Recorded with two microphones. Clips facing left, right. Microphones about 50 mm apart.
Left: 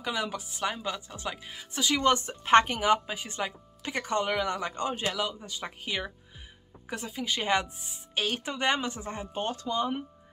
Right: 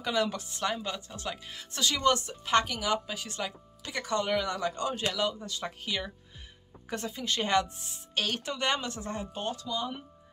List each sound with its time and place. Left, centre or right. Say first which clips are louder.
0.0 s a woman's voice: right 2 dB; centre
5.2 s a woman's voice: right 2 dB; centre
6.9 s a woman's voice: even; centre; by 10.0 s left